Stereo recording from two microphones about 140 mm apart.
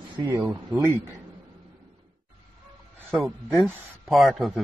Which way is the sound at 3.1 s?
Centre (ahead or behind).